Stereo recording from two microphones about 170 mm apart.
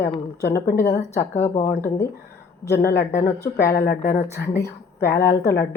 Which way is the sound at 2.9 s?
15° left (ahead or behind).